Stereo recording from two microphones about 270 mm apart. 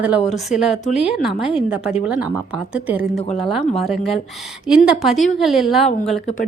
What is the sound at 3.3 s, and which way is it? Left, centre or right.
A woman's voice, centre.